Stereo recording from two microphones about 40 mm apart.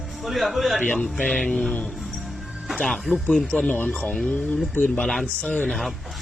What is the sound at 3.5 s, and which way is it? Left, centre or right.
Speech, left.